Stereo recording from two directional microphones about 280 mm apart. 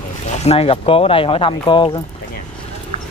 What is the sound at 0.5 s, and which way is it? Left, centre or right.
Speech, centre.